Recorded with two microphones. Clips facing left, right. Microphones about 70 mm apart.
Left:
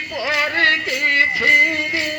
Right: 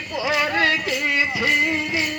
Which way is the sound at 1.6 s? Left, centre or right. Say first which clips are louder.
Left 4 dB; left.